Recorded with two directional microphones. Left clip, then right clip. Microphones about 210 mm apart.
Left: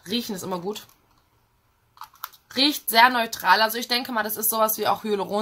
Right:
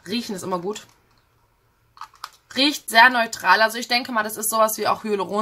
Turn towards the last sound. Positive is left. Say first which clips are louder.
# right 2 dB
turn(degrees=-5)  # may be behind; listen again after turning